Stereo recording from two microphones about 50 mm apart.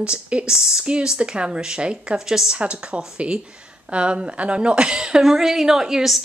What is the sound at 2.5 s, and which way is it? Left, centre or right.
Speech, right.